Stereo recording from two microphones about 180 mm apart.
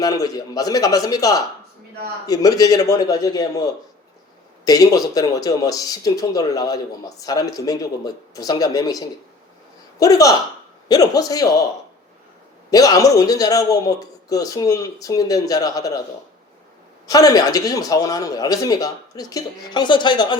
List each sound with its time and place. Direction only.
0.0 s a man's voice: 20° left (ahead or behind)
12.7 s a man's voice: 20° left (ahead or behind)
17.1 s a man's voice: 20° left (ahead or behind)